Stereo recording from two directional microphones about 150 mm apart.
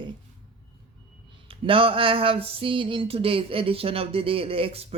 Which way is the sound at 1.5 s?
35° right (ahead or behind).